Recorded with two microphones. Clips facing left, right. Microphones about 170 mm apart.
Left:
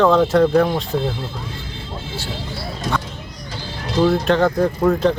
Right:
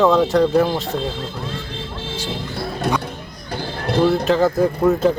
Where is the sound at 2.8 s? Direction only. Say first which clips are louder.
Right 2 dB; 60° right (ahead or behind).